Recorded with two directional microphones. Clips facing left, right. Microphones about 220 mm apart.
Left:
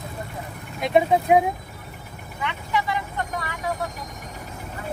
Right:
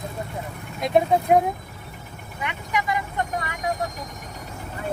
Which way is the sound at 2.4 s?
15° right (ahead or behind).